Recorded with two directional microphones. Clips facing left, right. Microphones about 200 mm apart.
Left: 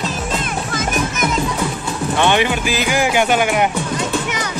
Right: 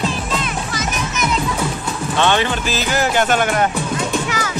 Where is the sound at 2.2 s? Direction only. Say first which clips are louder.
Left 1 dB; 15° left (ahead or behind).